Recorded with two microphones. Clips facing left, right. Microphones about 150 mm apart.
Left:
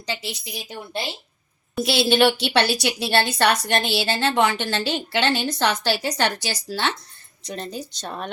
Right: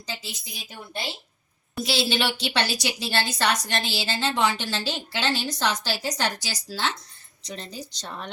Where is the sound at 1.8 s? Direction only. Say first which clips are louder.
Left 7 dB; 60° left (ahead or behind).